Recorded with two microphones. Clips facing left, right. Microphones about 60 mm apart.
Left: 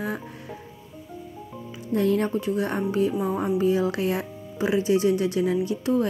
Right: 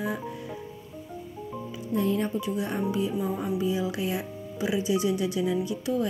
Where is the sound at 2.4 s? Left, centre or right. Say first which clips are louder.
Left 3 dB; left.